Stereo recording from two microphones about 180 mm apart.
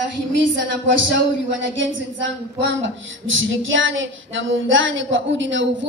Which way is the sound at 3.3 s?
90° right.